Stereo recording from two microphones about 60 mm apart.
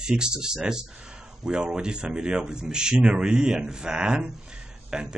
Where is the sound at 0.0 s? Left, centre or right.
Centre.